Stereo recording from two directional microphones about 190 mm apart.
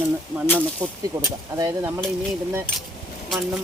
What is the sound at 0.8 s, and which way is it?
Speech, 15° right (ahead or behind).